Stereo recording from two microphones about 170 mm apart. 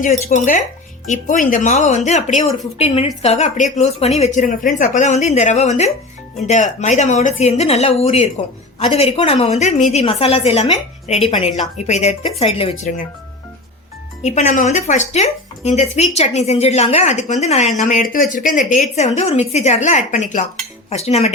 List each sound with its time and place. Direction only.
0.0 s a woman's voice: 50° left (ahead or behind)
14.2 s a woman's voice: 40° left (ahead or behind)